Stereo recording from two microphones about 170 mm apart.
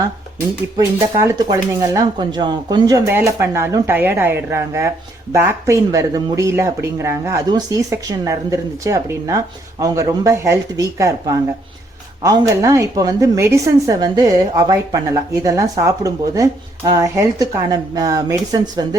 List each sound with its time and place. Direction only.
0.0 s a woman's voice: 20° right (ahead or behind)